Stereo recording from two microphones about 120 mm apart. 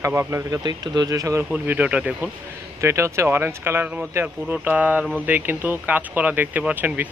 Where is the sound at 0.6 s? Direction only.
35° right (ahead or behind).